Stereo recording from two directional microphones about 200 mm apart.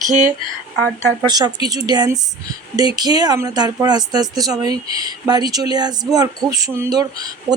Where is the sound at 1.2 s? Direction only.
20° right (ahead or behind).